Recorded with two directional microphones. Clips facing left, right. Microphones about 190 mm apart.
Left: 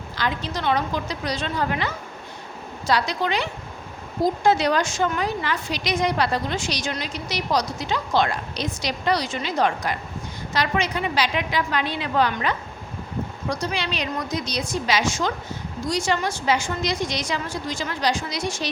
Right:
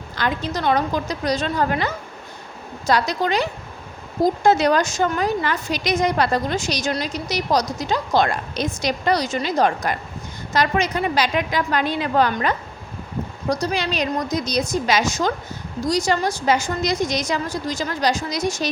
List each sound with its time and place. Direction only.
0.2 s a woman's voice: 50° right (ahead or behind)